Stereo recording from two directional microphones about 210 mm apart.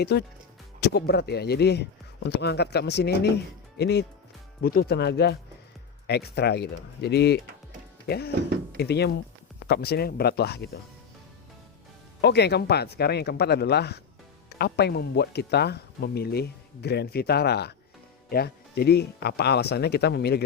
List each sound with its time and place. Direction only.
0.0 s speech: 50° left (ahead or behind)
12.2 s speech: 50° left (ahead or behind)